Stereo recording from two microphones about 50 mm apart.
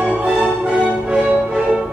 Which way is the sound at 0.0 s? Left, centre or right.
Right.